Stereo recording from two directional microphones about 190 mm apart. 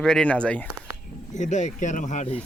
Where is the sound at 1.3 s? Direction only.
40° left (ahead or behind).